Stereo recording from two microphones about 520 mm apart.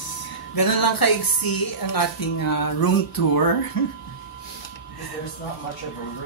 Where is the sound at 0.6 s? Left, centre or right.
Left.